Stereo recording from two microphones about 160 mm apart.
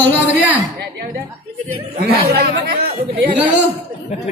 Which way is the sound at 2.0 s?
75° right (ahead or behind).